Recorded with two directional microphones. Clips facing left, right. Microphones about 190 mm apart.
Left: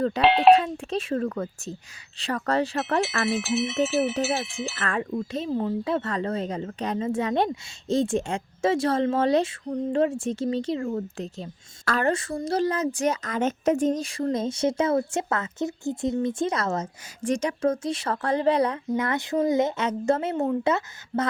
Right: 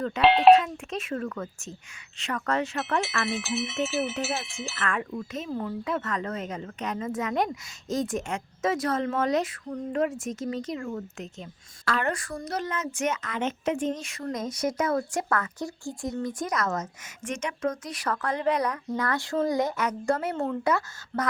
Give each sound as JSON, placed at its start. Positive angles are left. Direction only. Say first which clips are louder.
{"t": 0.2, "sound": "speech", "louder": "even", "side_deg": 0}
{"t": 0.5, "sound": "speech", "louder": "left 1 dB", "side_deg": 35}
{"t": 3.2, "sound": "speech", "louder": "left 5 dB", "side_deg": 0}
{"t": 4.8, "sound": "speech", "louder": "left 2 dB", "side_deg": 35}
{"t": 12.1, "sound": "a woman's voice", "louder": "left 7 dB", "side_deg": 25}